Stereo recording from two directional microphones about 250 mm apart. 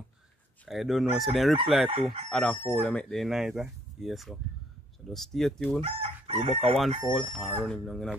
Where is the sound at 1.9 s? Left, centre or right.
Right.